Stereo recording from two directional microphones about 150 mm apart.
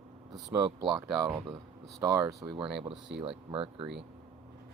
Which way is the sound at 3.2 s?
35° right (ahead or behind).